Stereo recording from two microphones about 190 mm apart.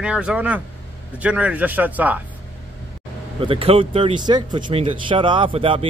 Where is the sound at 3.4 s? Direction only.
30° right (ahead or behind).